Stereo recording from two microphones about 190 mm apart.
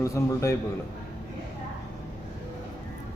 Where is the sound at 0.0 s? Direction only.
15° left (ahead or behind).